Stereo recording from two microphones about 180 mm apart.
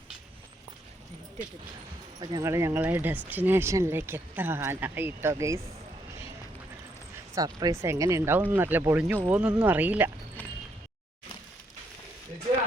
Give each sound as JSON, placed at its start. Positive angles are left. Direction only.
{"t": 2.2, "sound": "speech", "side_deg": -20}
{"t": 7.3, "sound": "speech", "side_deg": -20}